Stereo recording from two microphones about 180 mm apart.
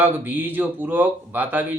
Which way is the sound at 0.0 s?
10° right (ahead or behind).